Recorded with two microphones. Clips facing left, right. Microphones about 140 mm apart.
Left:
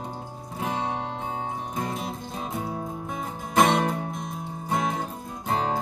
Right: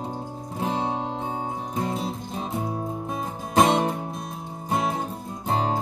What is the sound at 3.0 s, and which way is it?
Music, 30° right (ahead or behind).